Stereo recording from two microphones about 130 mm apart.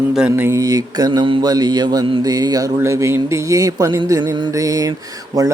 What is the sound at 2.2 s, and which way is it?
Speech, 30° right (ahead or behind).